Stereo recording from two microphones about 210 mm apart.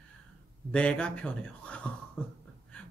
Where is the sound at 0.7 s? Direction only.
5° left (ahead or behind).